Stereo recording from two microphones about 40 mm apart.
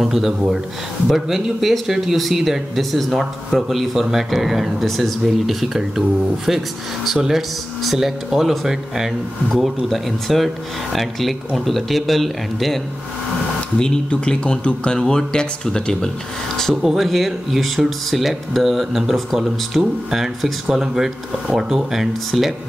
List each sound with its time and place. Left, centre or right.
0.0 s speech: centre
13.7 s speech: left
15.0 s speech: centre
16.8 s speech: centre